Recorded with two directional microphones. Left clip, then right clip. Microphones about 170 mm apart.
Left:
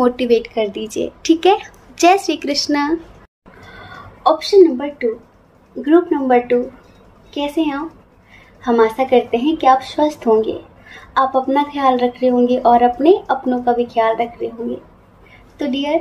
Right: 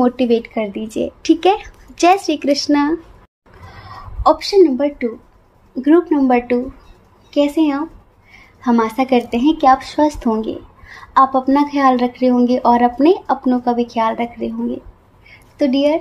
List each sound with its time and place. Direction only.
0.0 s a woman's voice: 45° right (ahead or behind)
4.2 s a woman's voice: 50° right (ahead or behind)
15.5 s a woman's voice: 45° right (ahead or behind)